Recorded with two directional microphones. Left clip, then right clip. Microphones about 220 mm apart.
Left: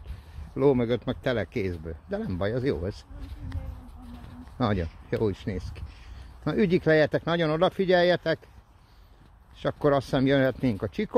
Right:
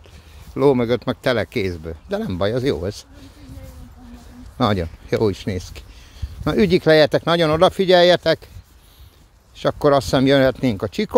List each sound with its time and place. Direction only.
0.6 s speech: 25° right (ahead or behind)
4.6 s speech: 25° right (ahead or behind)
9.6 s speech: 25° right (ahead or behind)